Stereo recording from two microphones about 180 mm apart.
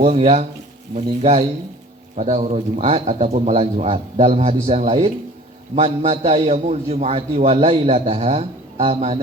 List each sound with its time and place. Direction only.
0.0 s a man's voice: 35° right (ahead or behind)